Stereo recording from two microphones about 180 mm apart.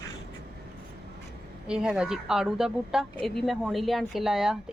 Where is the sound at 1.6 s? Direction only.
5° right (ahead or behind).